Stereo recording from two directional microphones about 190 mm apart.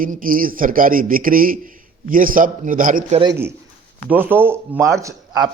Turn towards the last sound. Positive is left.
turn(degrees=-15)  # may be behind; listen again after turning